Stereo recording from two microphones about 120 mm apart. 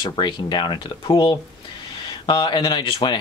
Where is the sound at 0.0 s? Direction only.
40° left (ahead or behind).